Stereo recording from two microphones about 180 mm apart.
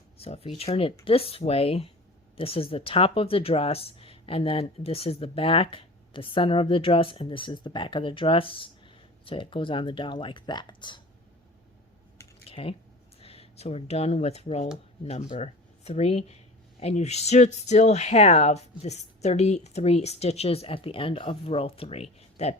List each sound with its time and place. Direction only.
0.2 s speech: 35° left (ahead or behind)
12.5 s typing: 30° left (ahead or behind)
13.2 s speech: 35° left (ahead or behind)